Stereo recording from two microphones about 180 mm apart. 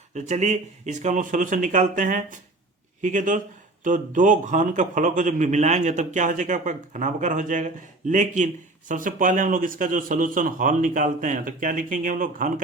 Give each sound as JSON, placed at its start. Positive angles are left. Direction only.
{"t": 0.1, "sound": "a man's voice", "side_deg": -40}